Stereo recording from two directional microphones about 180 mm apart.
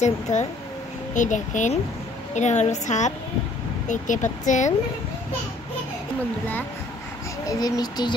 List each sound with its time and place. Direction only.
0.0 s a woman's voice: 40° left (ahead or behind)
7.4 s speech: 20° left (ahead or behind)